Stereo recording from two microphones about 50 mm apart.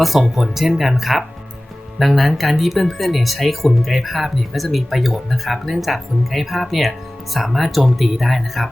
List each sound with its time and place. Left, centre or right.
0.0 s speech: centre